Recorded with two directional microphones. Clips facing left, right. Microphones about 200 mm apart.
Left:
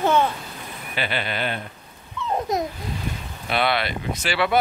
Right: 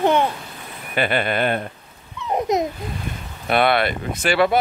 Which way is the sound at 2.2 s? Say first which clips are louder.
Right 4 dB; 20° right (ahead or behind).